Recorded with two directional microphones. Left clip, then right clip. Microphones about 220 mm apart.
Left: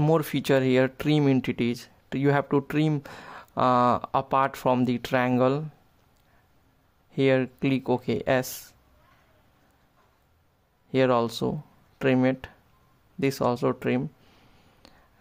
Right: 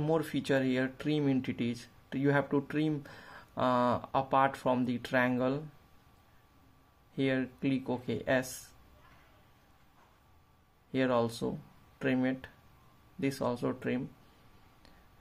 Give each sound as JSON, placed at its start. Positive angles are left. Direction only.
{"t": 0.0, "sound": "speech", "side_deg": 45}
{"t": 7.2, "sound": "speech", "side_deg": 40}
{"t": 10.9, "sound": "speech", "side_deg": 40}